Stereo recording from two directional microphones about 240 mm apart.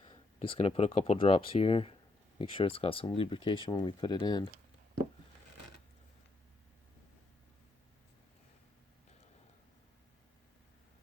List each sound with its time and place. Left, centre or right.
0.0 s speech: left